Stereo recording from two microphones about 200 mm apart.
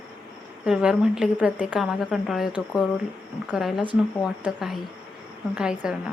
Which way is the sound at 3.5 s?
Centre (ahead or behind).